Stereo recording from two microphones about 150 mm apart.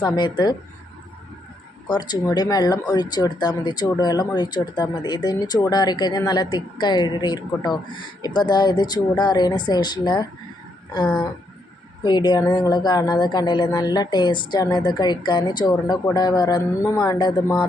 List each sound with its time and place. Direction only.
0.0 s speech: 30° left (ahead or behind)
1.9 s speech: 30° left (ahead or behind)